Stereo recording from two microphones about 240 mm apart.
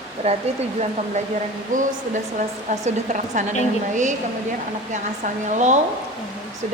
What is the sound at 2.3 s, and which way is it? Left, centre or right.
A woman's voice, right.